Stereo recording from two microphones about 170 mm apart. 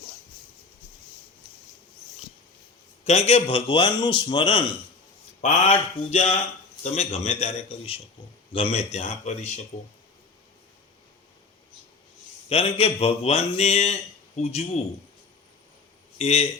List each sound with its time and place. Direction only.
3.0 s a man's voice: 40° left (ahead or behind)
12.5 s speech: 35° left (ahead or behind)
16.1 s speech: 35° left (ahead or behind)